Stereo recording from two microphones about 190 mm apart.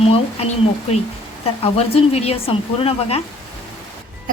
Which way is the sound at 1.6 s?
30° left (ahead or behind).